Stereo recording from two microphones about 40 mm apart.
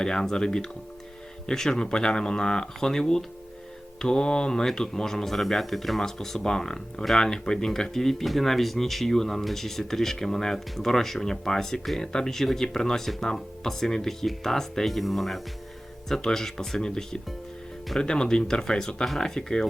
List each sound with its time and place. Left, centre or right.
0.0 s speech: centre
4.6 s speech: centre
16.0 s speech: centre
19.0 s speech: centre
19.4 s speech: centre